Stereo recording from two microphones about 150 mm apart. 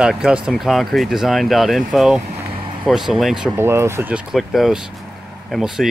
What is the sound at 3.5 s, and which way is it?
Speech, 15° right (ahead or behind).